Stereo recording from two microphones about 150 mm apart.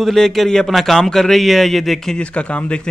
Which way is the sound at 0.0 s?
Centre (ahead or behind).